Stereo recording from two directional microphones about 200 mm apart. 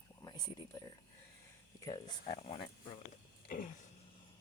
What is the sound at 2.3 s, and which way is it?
Speech, 30° left (ahead or behind).